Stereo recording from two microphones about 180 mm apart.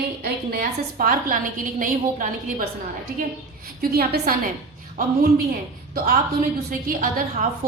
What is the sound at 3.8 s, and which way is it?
Speech, 60° right (ahead or behind).